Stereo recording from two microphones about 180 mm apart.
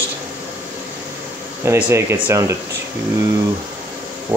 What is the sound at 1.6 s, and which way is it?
Speech, 15° right (ahead or behind).